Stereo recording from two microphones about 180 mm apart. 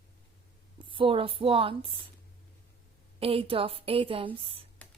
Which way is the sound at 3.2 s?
30° right (ahead or behind).